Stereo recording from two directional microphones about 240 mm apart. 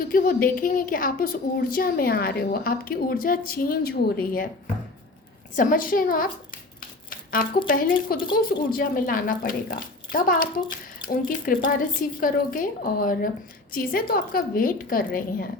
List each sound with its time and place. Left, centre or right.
0.1 s a woman's voice: left
5.5 s a woman's voice: left
7.1 s a sound: left
7.7 s a woman's voice: left